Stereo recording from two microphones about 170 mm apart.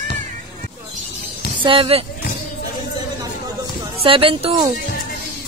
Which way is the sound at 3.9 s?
30° right (ahead or behind).